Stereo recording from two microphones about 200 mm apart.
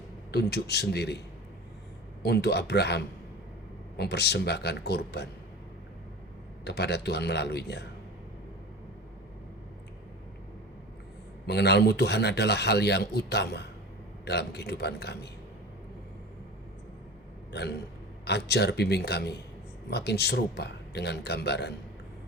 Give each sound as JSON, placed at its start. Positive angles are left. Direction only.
{"t": 0.3, "sound": "a man's voice", "side_deg": 55}
{"t": 2.2, "sound": "a man's voice", "side_deg": 55}
{"t": 6.7, "sound": "a man's voice", "side_deg": 55}
{"t": 11.4, "sound": "a man's voice", "side_deg": 55}
{"t": 17.5, "sound": "a man's voice", "side_deg": 55}